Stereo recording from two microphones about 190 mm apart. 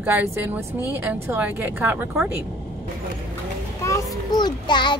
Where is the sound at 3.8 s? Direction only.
15° left (ahead or behind).